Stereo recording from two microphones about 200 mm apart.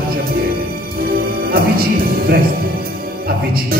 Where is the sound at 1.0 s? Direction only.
50° right (ahead or behind).